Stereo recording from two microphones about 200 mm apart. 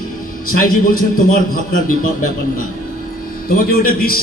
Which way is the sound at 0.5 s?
45° left (ahead or behind).